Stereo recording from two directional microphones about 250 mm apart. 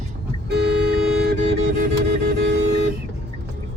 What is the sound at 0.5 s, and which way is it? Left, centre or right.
Music, right.